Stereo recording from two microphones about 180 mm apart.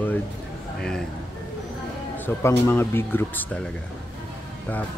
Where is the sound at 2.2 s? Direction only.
10° left (ahead or behind).